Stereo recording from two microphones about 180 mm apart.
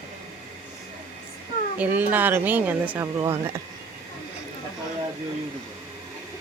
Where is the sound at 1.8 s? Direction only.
10° right (ahead or behind).